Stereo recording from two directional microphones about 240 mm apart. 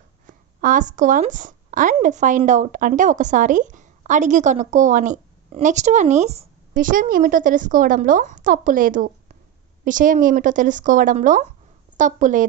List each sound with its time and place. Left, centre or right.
0.3 s a woman's voice: right